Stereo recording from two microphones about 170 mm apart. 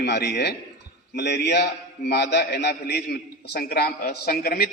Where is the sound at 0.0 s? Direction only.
85° left.